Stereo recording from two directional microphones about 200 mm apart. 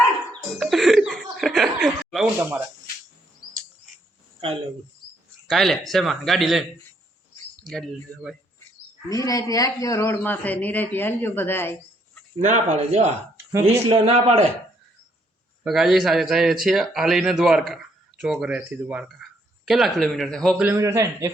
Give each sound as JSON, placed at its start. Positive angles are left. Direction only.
{"t": 0.6, "sound": "chuckle", "side_deg": 0}
{"t": 5.5, "sound": "a man's voice", "side_deg": 0}
{"t": 9.0, "sound": "speech", "side_deg": 15}
{"t": 12.4, "sound": "speech", "side_deg": -35}
{"t": 13.3, "sound": "speech", "side_deg": -15}
{"t": 14.0, "sound": "speech", "side_deg": -30}
{"t": 15.6, "sound": "a man's voice", "side_deg": 0}
{"t": 20.7, "sound": "a man's voice", "side_deg": -15}